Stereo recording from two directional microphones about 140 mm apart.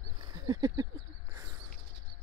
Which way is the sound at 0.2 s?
30° right (ahead or behind).